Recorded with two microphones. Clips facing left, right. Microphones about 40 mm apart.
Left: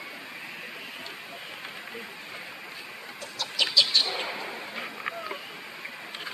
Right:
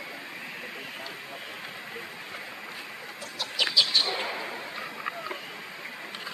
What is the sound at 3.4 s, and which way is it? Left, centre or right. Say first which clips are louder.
Chicken: left 1 dB; centre.